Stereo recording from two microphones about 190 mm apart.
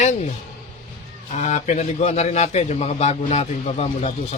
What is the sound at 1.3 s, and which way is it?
A man's voice, 40° left (ahead or behind).